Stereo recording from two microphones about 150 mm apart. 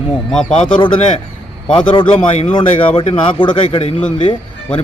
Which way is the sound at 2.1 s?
50° left (ahead or behind).